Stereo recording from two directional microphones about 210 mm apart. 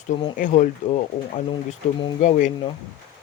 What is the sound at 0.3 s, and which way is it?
Speech, 40° left (ahead or behind).